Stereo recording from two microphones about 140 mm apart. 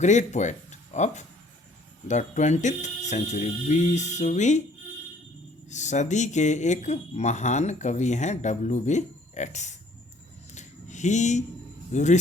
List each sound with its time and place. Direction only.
0.0 s speech: 55° left (ahead or behind)
5.6 s speech: 55° left (ahead or behind)
10.5 s a sound: 60° left (ahead or behind)
11.9 s speech: 60° left (ahead or behind)